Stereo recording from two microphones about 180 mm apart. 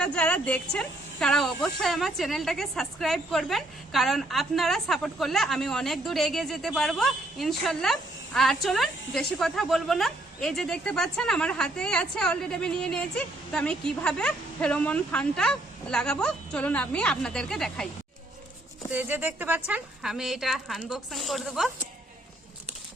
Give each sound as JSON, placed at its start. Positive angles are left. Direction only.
{"t": 0.0, "sound": "speech", "side_deg": 5}
{"t": 18.9, "sound": "speech", "side_deg": -10}